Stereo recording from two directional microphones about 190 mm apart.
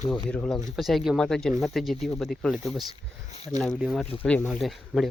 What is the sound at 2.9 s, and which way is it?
Speech, 35° left (ahead or behind).